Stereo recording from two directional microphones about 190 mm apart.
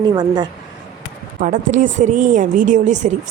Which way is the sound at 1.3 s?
45° right (ahead or behind).